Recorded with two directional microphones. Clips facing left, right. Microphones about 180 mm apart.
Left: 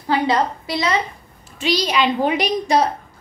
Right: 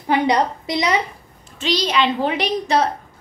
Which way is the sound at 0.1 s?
20° right (ahead or behind).